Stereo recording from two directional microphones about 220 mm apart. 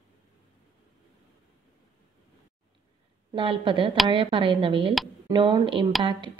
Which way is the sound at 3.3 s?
20° right (ahead or behind).